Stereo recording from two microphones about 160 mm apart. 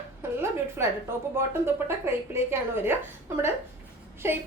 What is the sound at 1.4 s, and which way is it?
A woman's voice, 15° right (ahead or behind).